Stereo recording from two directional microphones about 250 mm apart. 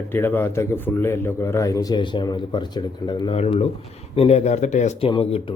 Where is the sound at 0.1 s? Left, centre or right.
Centre.